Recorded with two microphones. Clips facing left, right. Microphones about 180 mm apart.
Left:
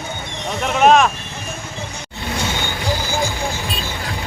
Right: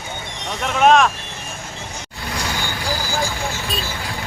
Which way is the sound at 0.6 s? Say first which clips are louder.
Left 1 dB; 5° left (ahead or behind).